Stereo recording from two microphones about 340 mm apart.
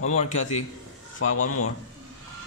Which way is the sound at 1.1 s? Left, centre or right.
Left.